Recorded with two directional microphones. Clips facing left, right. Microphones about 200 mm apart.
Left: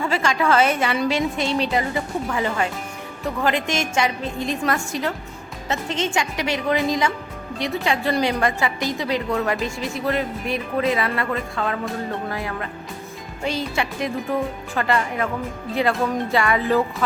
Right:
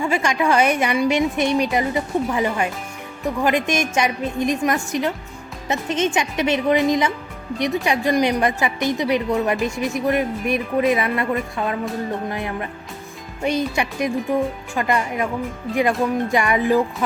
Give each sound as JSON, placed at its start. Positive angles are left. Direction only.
{"t": 0.0, "sound": "a woman's voice", "side_deg": -15}